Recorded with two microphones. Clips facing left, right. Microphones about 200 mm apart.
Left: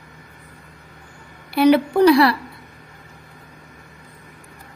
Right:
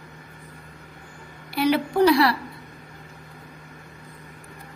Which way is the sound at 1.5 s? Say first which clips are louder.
Left 7 dB; 60° left (ahead or behind).